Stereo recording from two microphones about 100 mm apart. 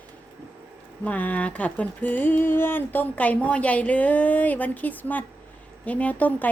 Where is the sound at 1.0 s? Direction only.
15° left (ahead or behind).